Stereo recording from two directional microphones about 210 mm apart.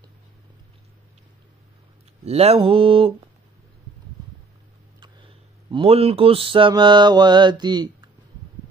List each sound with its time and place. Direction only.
2.2 s mantra: 30° right (ahead or behind)
5.0 s speech: 25° right (ahead or behind)